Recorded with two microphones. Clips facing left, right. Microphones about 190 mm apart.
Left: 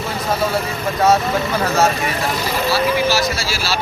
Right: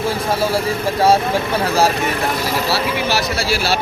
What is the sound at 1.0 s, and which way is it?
Speech, 30° right (ahead or behind).